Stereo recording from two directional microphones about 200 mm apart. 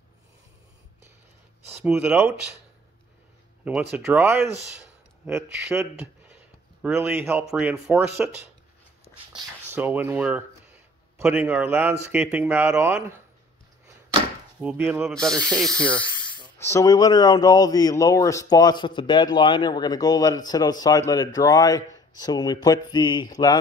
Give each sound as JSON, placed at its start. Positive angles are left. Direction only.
{"t": 1.9, "sound": "a man's voice", "side_deg": -10}
{"t": 3.9, "sound": "a man's voice", "side_deg": -10}
{"t": 9.8, "sound": "a man's voice", "side_deg": -10}
{"t": 14.6, "sound": "speech", "side_deg": -5}
{"t": 16.5, "sound": "speech", "side_deg": 15}